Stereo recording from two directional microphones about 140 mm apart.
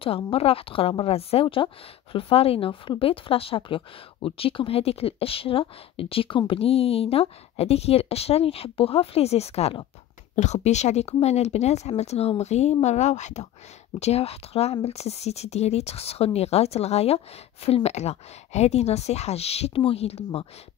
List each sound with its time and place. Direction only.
0.0 s a woman's voice: 40° left (ahead or behind)